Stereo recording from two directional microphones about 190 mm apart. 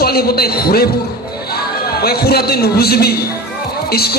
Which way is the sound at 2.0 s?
55° left (ahead or behind).